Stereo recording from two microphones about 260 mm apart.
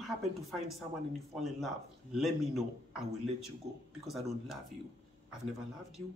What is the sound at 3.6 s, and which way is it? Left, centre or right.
Speech, right.